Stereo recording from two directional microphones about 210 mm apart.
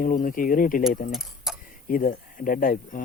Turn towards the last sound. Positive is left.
turn(degrees=40)  # may be behind; listen again after turning